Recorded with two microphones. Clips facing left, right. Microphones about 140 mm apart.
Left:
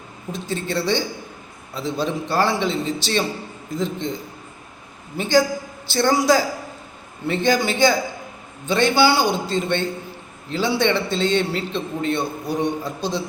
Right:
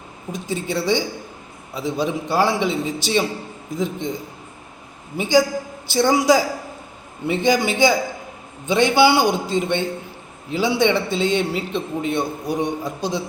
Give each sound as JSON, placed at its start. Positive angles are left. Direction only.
{"t": 0.3, "sound": "a man's voice", "side_deg": -15}
{"t": 5.1, "sound": "a man's voice", "side_deg": -15}